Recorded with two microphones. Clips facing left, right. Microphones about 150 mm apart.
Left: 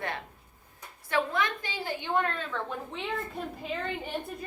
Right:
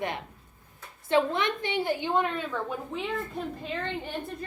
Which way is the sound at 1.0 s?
25° right (ahead or behind).